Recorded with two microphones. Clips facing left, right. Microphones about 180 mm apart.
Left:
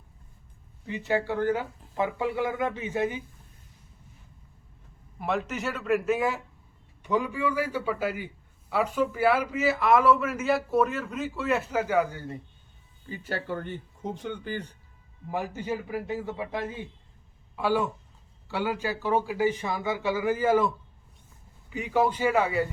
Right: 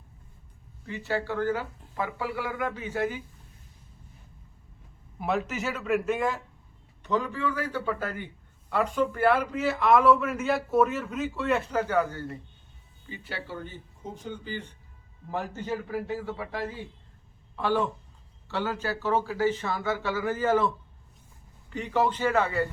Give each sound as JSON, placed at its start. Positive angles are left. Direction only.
{"t": 0.9, "sound": "a man's voice", "side_deg": 15}
{"t": 5.2, "sound": "a man's voice", "side_deg": 0}
{"t": 13.1, "sound": "speech", "side_deg": 40}
{"t": 14.5, "sound": "speech", "side_deg": 40}
{"t": 15.3, "sound": "a man's voice", "side_deg": 10}
{"t": 17.6, "sound": "a man's voice", "side_deg": 10}